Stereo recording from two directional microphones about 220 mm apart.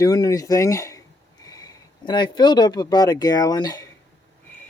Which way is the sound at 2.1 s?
20° left (ahead or behind).